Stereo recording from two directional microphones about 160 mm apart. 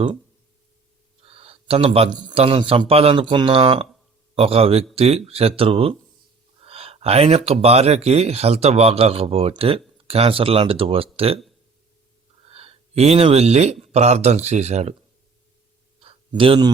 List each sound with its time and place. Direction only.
1.2 s speech: 35° right (ahead or behind)
12.5 s speech: 40° right (ahead or behind)
16.0 s a sound: 35° right (ahead or behind)